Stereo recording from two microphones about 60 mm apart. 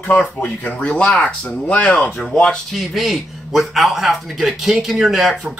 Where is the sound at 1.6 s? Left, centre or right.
Left.